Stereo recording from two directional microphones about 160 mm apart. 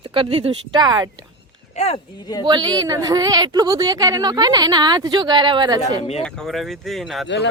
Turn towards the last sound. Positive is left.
turn(degrees=90)